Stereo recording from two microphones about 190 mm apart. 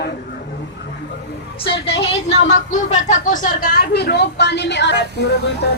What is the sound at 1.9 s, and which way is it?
Speech, 65° left (ahead or behind).